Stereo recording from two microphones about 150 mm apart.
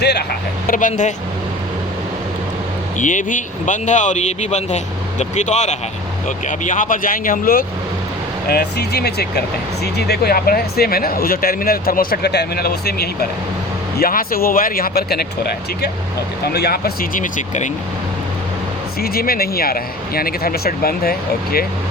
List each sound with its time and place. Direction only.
0.0 s speech: 90° left
0.7 s speech: 60° left (ahead or behind)
3.0 s speech: 60° left (ahead or behind)
8.4 s speech: 90° left
14.0 s speech: 75° left (ahead or behind)
16.5 s speech: 90° left; by 17.7 s 55° left (ahead or behind)
18.9 s speech: 90° left